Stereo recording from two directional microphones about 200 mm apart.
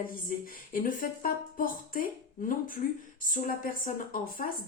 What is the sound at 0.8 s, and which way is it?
Speech, 45° left (ahead or behind).